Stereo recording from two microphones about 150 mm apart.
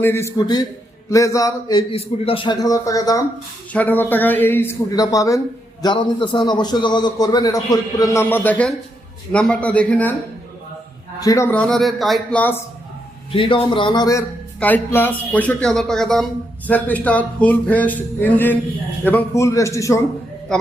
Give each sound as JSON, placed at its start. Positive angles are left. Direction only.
{"t": 0.0, "sound": "a man's voice", "side_deg": 15}
{"t": 1.9, "sound": "a man's voice", "side_deg": 40}
{"t": 3.7, "sound": "a man's voice", "side_deg": 10}
{"t": 11.2, "sound": "speech", "side_deg": 20}
{"t": 12.4, "sound": "speech", "side_deg": 15}
{"t": 13.3, "sound": "a man's voice", "side_deg": 35}
{"t": 14.6, "sound": "a man's voice", "side_deg": 15}